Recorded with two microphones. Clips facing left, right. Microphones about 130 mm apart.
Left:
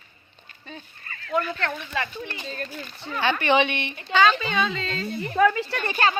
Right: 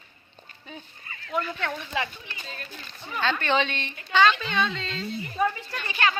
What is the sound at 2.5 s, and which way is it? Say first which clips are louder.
Speech: left 7 dB; 40° left (ahead or behind).